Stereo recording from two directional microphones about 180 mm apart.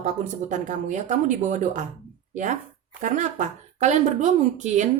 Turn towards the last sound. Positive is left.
turn(degrees=-40)  # may be behind; listen again after turning